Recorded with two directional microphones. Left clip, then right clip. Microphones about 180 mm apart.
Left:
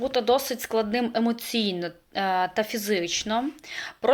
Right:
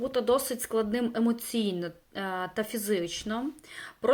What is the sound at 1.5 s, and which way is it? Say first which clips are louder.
Speech: left 4 dB; 50° left (ahead or behind).